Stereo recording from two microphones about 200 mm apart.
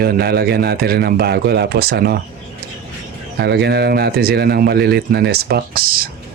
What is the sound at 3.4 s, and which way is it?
Speech, 55° right (ahead or behind).